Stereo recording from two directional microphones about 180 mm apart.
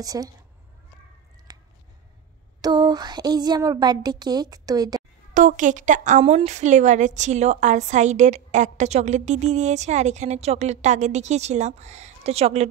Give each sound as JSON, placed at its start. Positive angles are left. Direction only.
{"t": 0.0, "sound": "speech", "side_deg": -20}
{"t": 1.5, "sound": "a sound", "side_deg": -20}
{"t": 2.6, "sound": "speech", "side_deg": -20}
{"t": 5.3, "sound": "a woman's voice", "side_deg": -45}